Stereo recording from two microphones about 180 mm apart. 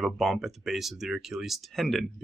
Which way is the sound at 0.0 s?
Centre (ahead or behind).